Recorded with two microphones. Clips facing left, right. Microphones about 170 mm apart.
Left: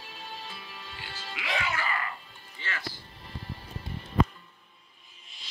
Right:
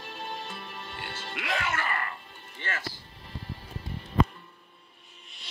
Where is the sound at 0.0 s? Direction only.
50° right (ahead or behind).